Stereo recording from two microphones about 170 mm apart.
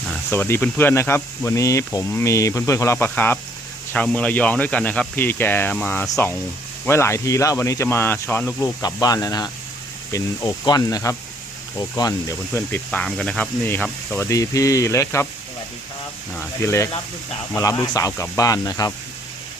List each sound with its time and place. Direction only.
0.3 s speech: 15° left (ahead or behind)
12.5 s speech: 10° left (ahead or behind)
14.2 s speech: 20° left (ahead or behind)
16.6 s speech: 15° left (ahead or behind)